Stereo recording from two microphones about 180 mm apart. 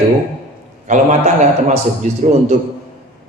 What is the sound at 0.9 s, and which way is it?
Mantra, 40° right (ahead or behind).